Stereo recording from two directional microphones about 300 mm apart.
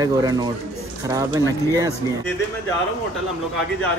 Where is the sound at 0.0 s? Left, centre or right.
Centre.